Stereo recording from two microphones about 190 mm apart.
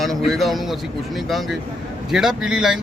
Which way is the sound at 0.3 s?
Centre (ahead or behind).